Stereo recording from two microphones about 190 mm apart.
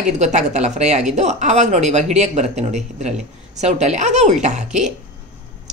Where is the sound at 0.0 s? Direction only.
40° right (ahead or behind).